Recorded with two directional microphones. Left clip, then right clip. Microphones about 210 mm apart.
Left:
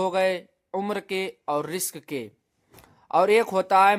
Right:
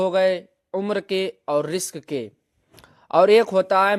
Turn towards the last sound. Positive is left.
turn(degrees=-15)  # may be behind; listen again after turning